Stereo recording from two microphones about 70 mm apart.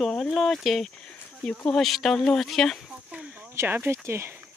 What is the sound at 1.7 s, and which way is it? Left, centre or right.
Speech, centre.